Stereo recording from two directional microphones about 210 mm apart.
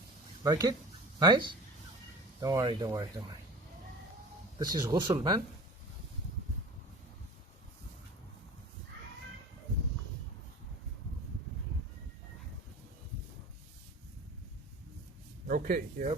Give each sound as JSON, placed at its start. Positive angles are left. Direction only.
{"t": 0.4, "sound": "speech", "side_deg": -20}
{"t": 4.6, "sound": "speech", "side_deg": -20}
{"t": 15.4, "sound": "speech", "side_deg": -40}